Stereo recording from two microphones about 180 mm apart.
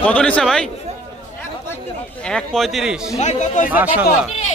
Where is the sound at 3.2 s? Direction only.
40° left (ahead or behind).